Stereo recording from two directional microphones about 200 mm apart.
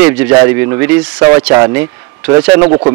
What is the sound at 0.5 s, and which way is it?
A man's voice, 10° right (ahead or behind).